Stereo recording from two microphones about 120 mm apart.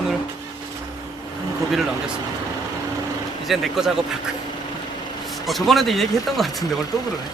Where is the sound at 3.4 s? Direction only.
Centre (ahead or behind).